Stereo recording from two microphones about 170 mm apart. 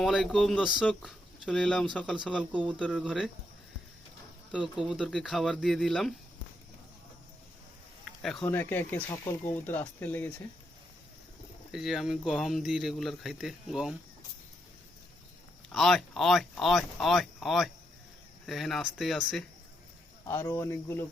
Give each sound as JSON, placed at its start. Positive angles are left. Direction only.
{"t": 0.0, "sound": "speech", "side_deg": 0}
{"t": 2.6, "sound": "speech", "side_deg": 5}
{"t": 2.9, "sound": "speech", "side_deg": -5}
{"t": 4.5, "sound": "speech", "side_deg": -5}
{"t": 8.2, "sound": "speech", "side_deg": 0}
{"t": 11.7, "sound": "speech", "side_deg": 0}
{"t": 15.7, "sound": "speech", "side_deg": 0}
{"t": 20.2, "sound": "speech", "side_deg": 15}